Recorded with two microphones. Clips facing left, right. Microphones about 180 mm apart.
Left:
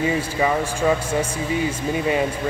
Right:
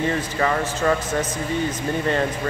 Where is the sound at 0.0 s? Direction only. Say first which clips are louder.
Left 1 dB; 10° left (ahead or behind).